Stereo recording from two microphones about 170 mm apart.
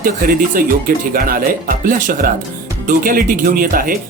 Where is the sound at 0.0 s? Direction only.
55° right (ahead or behind).